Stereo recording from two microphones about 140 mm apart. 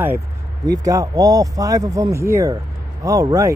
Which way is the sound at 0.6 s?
25° right (ahead or behind).